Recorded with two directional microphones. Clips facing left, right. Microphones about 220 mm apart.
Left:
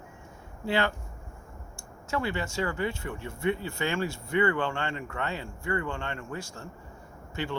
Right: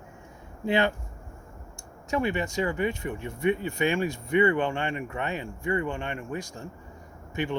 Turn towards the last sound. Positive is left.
turn(degrees=-15)  # may be behind; listen again after turning